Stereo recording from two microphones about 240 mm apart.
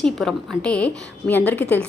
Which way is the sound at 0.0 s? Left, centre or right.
Centre.